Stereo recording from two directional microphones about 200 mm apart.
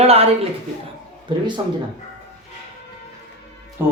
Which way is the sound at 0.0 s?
30° right (ahead or behind).